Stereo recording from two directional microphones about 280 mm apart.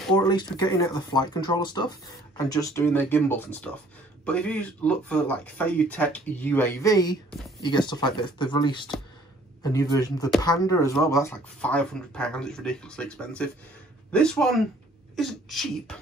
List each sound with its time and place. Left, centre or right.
0.1 s speech: centre